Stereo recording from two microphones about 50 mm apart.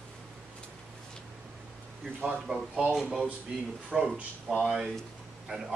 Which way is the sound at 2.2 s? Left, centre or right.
Centre.